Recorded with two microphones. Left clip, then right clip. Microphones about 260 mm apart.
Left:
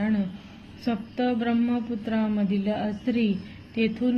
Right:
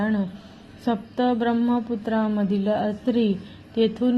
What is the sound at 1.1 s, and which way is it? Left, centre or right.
A woman's voice, centre.